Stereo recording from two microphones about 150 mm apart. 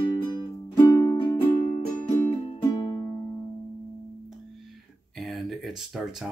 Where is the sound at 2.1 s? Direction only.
40° left (ahead or behind).